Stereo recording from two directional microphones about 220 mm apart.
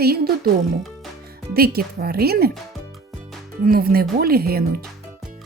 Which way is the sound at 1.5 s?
45° right (ahead or behind).